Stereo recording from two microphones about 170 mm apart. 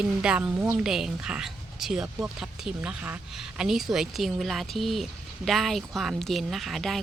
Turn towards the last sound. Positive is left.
turn(degrees=0)  # may be behind; listen again after turning